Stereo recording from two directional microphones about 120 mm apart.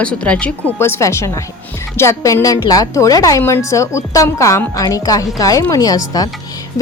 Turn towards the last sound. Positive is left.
turn(degrees=30)  # may be behind; listen again after turning